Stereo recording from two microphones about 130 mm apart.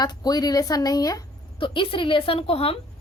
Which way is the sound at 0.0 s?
30° left (ahead or behind).